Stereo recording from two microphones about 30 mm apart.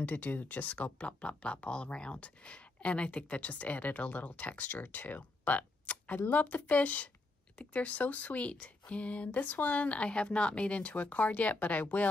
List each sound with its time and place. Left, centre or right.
0.0 s speech: left